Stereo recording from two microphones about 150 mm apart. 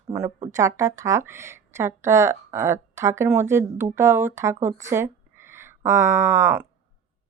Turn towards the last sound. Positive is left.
turn(degrees=-15)  # may be behind; listen again after turning